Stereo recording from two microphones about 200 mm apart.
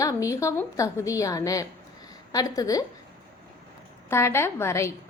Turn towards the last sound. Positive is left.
turn(degrees=15)  # may be behind; listen again after turning